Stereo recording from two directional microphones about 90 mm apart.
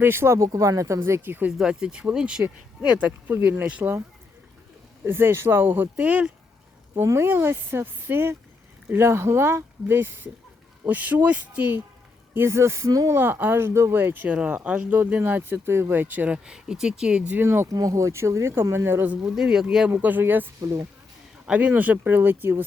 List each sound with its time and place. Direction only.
0.0 s speech: 25° right (ahead or behind)
1.5 s speech: 10° right (ahead or behind)
5.0 s speech: 25° right (ahead or behind)
6.9 s speech: 30° right (ahead or behind)
13.1 s speech: 25° right (ahead or behind)
17.7 s speech: 40° right (ahead or behind); by 19.1 s 25° right (ahead or behind)
19.2 s speech: 5° right (ahead or behind)
19.9 s speech: 20° right (ahead or behind)